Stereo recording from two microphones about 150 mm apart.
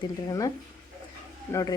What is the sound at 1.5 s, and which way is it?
Speech, 25° left (ahead or behind).